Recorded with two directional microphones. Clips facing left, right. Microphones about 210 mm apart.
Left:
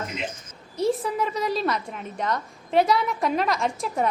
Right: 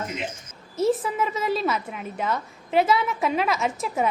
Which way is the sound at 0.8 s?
Centre (ahead or behind).